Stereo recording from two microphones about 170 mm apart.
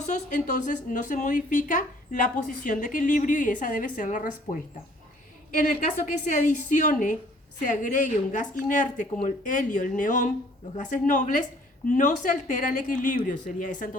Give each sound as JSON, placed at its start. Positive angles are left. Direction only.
{"t": 0.3, "sound": "speech", "side_deg": 45}
{"t": 5.5, "sound": "speech", "side_deg": 50}